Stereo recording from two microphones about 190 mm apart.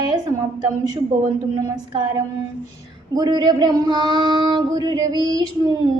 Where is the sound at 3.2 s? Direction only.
20° right (ahead or behind).